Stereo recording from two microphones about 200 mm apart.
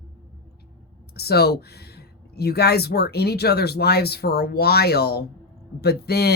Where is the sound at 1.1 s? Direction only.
50° left (ahead or behind).